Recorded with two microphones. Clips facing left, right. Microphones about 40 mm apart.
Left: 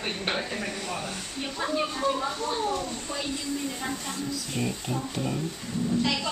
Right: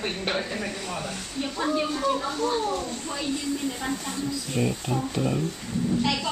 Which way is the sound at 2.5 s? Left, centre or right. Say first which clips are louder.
Right 2 dB; centre.